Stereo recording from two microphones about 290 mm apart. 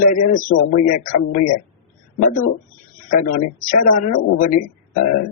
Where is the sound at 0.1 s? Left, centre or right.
Left.